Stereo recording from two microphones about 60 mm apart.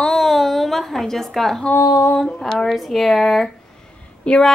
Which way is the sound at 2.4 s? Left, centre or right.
Centre.